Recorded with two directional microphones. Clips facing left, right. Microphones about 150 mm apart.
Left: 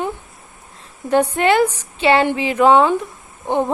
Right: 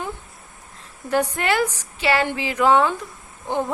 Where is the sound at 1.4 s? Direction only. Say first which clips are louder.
Left 7 dB; 20° left (ahead or behind).